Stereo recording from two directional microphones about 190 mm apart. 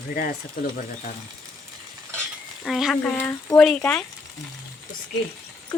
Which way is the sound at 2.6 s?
Centre (ahead or behind).